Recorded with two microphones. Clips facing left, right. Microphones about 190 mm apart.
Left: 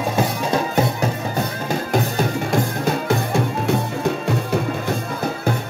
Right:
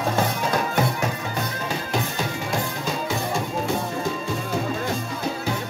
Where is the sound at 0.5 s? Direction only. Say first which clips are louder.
Left 6 dB; 30° left (ahead or behind).